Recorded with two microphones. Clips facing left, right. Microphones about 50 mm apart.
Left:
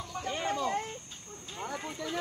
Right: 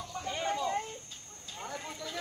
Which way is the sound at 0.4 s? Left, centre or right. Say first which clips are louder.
Even; left.